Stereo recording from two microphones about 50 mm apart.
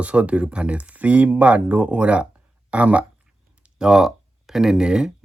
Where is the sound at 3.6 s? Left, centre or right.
Centre.